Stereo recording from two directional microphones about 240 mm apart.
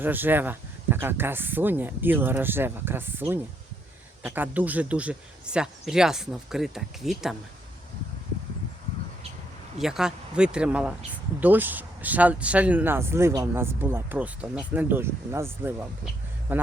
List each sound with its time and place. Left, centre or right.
0.0 s speech: centre
9.7 s speech: centre